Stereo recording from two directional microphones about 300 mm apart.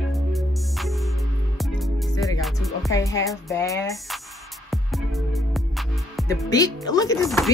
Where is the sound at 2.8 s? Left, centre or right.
Centre.